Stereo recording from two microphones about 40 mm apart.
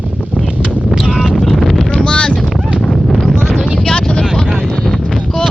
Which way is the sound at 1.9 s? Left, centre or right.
Left.